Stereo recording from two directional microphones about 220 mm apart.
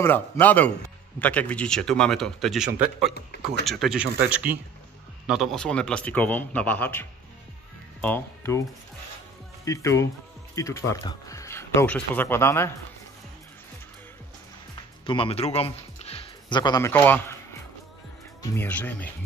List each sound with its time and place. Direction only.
0.0 s speech: 10° left (ahead or behind)
9.7 s speech: 15° left (ahead or behind)
15.0 s speech: 25° left (ahead or behind); by 17.4 s 10° left (ahead or behind)
18.4 s speech: 10° left (ahead or behind)